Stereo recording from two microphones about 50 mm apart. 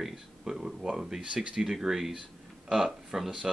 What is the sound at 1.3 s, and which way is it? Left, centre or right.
Speech, right.